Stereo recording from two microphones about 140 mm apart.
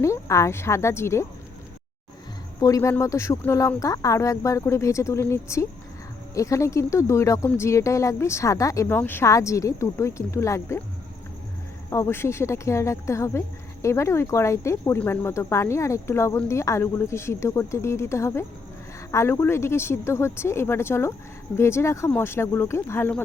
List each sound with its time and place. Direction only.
0.0 s speech: 20° left (ahead or behind)
2.6 s speech: 25° left (ahead or behind)
11.9 s speech: 20° left (ahead or behind)